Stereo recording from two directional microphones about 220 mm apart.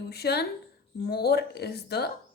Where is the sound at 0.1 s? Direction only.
45° left (ahead or behind).